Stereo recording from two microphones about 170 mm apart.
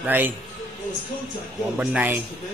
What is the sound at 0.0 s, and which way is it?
Speech, 10° right (ahead or behind).